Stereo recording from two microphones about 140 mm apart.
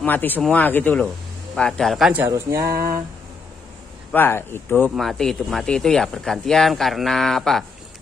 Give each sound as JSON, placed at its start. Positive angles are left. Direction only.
{"t": 0.0, "sound": "speech", "side_deg": 15}
{"t": 1.5, "sound": "speech", "side_deg": 0}
{"t": 2.1, "sound": "a sound", "side_deg": -20}
{"t": 4.1, "sound": "speech", "side_deg": 15}
{"t": 4.9, "sound": "speech", "side_deg": 0}